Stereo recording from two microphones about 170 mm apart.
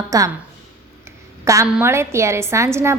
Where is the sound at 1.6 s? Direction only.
10° right (ahead or behind).